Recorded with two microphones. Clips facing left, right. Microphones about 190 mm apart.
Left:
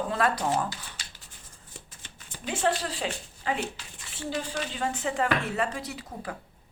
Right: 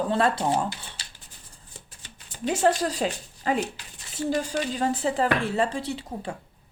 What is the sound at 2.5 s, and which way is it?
Speech, 40° right (ahead or behind).